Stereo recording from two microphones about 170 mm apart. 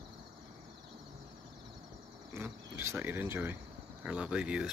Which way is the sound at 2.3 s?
15° right (ahead or behind).